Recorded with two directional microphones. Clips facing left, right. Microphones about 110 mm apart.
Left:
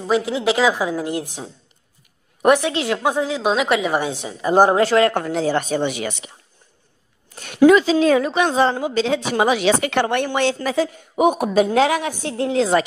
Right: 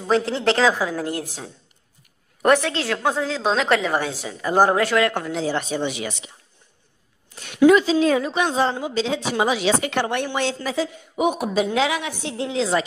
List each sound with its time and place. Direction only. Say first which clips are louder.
0.0 s a woman's voice: left 1 dB; 10° left (ahead or behind); by 5.1 s 30° left (ahead or behind)
5.1 s speech: left 4 dB; 50° left (ahead or behind)
7.3 s a sound: left 3 dB; 45° left (ahead or behind)
7.6 s a woman's voice: left 2 dB; 85° left; by 12.8 s 50° left (ahead or behind)